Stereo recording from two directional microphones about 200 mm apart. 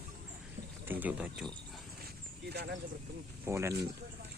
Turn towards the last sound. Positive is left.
turn(degrees=-15)  # may be behind; listen again after turning